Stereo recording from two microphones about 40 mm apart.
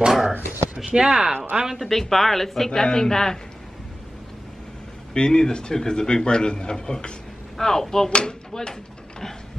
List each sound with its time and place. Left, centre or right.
0.0 s a sound: centre
0.9 s speech: centre
1.8 s speech: centre
5.1 s a man's voice: centre
7.5 s a man's voice: centre